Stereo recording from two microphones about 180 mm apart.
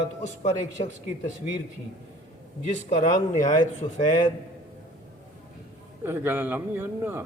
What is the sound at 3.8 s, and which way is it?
Speech, 20° left (ahead or behind).